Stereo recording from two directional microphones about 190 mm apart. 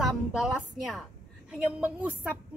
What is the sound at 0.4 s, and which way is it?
A woman's voice, centre (ahead or behind).